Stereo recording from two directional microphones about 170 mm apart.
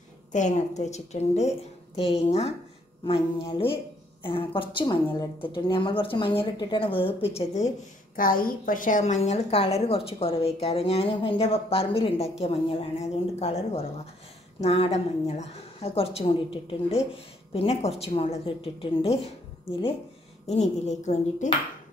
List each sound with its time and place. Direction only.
0.3 s a woman's voice: 45° left (ahead or behind)
7.3 s a woman's voice: 45° left (ahead or behind)
8.2 s a woman's voice: 55° left (ahead or behind); by 19.1 s 30° left (ahead or behind)
20.4 s a woman's voice: 40° left (ahead or behind)